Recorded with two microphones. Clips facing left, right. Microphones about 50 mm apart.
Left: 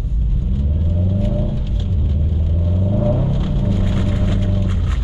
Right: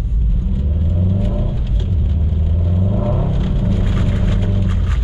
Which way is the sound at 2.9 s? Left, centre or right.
Centre.